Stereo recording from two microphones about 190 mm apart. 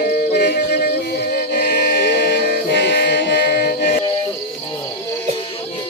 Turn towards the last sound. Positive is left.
turn(degrees=55)  # may be behind; listen again after turning